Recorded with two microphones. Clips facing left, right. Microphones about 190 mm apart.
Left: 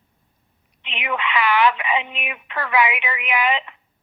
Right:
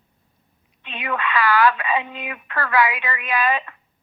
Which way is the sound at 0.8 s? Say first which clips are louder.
Even; 20° left (ahead or behind).